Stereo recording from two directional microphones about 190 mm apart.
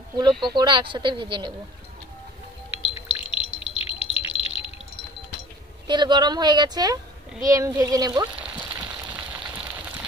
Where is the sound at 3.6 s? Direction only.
30° left (ahead or behind).